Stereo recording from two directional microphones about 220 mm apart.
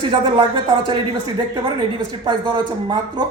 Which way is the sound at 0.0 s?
20° right (ahead or behind).